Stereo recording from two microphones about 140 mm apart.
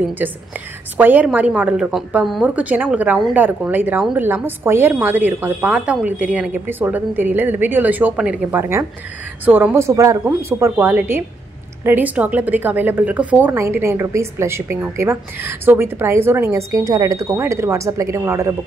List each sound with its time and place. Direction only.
0.2 s a woman's voice: 10° right (ahead or behind)